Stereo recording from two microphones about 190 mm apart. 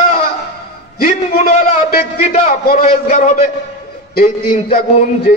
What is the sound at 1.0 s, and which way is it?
A man's voice, 35° left (ahead or behind).